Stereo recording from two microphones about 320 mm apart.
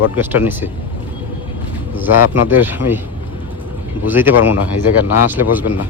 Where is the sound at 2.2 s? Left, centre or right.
Left.